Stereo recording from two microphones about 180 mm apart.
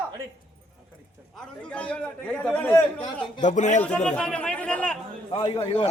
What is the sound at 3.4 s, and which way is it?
Speech, 40° left (ahead or behind).